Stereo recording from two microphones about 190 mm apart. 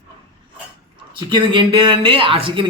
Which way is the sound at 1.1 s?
25° right (ahead or behind).